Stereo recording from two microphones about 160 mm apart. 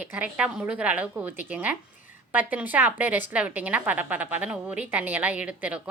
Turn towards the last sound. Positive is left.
turn(degrees=-10)  # may be behind; listen again after turning